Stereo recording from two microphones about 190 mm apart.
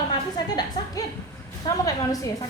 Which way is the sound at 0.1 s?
20° left (ahead or behind).